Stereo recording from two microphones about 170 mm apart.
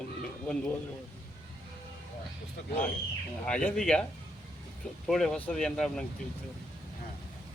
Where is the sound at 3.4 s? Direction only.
5° left (ahead or behind).